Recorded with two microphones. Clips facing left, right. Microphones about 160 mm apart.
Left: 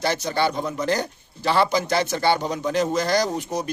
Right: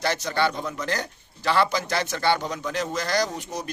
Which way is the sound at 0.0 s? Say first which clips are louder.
Left 2 dB; 25° left (ahead or behind).